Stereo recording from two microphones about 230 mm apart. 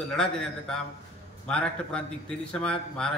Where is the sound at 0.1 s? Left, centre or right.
Centre.